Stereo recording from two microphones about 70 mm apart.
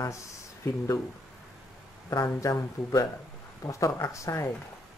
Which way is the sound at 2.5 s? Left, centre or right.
Left.